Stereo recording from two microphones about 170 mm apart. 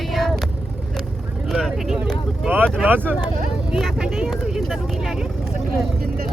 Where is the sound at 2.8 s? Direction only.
10° right (ahead or behind).